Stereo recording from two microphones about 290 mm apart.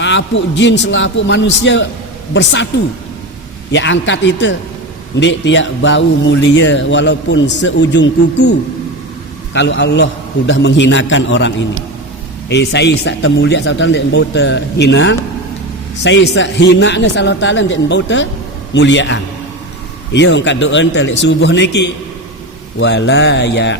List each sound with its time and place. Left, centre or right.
0.0 s speech: left